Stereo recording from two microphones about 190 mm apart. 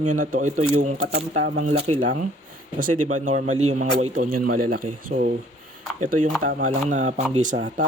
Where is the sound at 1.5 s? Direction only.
35° right (ahead or behind).